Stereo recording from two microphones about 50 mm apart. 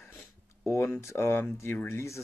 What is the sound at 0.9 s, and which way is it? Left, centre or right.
Speech, left.